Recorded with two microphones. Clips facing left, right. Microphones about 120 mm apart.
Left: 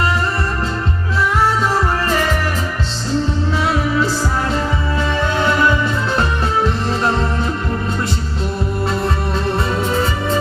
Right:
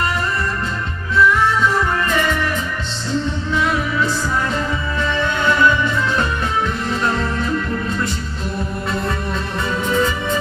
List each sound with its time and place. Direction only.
1.1 s music: 35° left (ahead or behind)
3.5 s music: 35° left (ahead or behind)
5.4 s music: 35° left (ahead or behind)
7.0 s music: 30° left (ahead or behind)
9.9 s music: 35° left (ahead or behind)